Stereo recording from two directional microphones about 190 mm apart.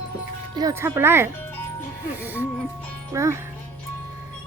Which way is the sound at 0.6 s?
15° right (ahead or behind).